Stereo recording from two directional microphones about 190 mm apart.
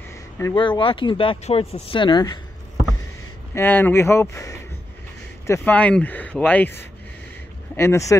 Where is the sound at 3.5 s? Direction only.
10° left (ahead or behind).